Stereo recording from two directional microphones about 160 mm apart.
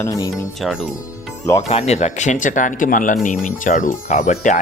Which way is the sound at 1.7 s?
40° left (ahead or behind).